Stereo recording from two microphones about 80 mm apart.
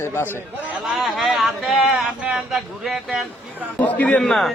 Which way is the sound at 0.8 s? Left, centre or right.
Centre.